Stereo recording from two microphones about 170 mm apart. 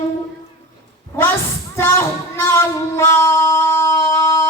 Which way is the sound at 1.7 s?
15° left (ahead or behind).